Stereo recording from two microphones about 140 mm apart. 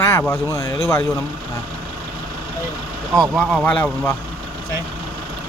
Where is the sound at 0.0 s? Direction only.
20° left (ahead or behind).